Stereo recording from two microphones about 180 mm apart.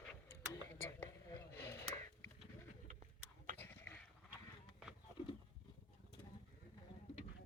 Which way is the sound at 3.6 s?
10° left (ahead or behind).